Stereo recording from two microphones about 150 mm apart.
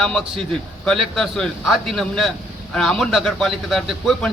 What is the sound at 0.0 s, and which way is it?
A man's voice, centre (ahead or behind).